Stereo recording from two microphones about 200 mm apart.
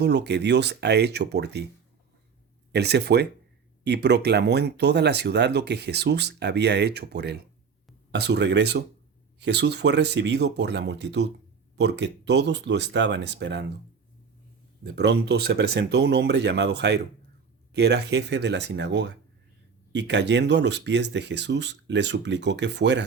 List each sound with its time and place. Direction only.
0.0 s speech: 60° right (ahead or behind)
2.7 s speech: 55° right (ahead or behind)
14.8 s speech: 55° right (ahead or behind)